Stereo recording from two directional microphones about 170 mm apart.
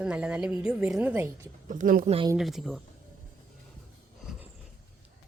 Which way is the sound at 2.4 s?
Centre (ahead or behind).